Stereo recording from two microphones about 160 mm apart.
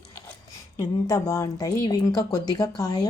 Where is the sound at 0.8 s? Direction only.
20° left (ahead or behind).